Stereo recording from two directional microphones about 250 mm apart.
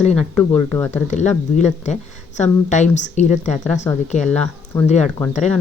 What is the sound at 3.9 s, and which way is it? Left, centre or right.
Speech, centre.